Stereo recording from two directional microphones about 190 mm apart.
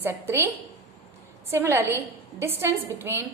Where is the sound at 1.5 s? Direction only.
15° right (ahead or behind).